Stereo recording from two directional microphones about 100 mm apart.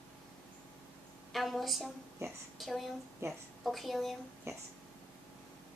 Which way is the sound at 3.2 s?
30° right (ahead or behind).